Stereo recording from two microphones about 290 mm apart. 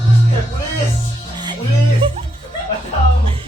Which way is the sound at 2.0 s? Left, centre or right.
Centre.